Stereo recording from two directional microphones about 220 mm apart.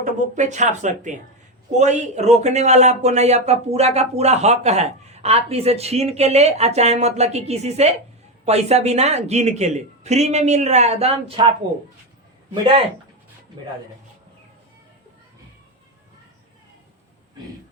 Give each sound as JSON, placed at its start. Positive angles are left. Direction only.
{"t": 0.0, "sound": "speech", "side_deg": -30}